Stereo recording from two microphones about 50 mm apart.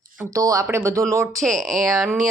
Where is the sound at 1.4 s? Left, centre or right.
Centre.